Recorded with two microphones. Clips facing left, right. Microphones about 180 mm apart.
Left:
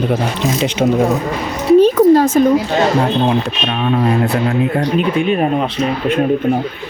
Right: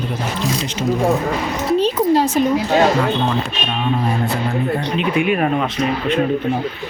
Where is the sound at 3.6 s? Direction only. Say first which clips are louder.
Left 4 dB; 70° left (ahead or behind).